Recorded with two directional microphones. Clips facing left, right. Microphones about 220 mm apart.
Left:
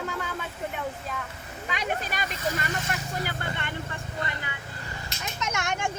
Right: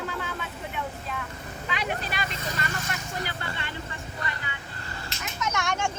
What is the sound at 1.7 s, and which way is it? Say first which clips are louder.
Vehicle: left 1 dB; 45° left (ahead or behind).